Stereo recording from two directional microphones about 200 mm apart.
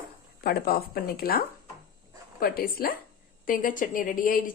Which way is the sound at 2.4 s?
45° left (ahead or behind).